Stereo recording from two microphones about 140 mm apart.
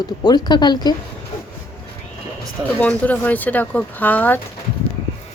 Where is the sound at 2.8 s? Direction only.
10° left (ahead or behind).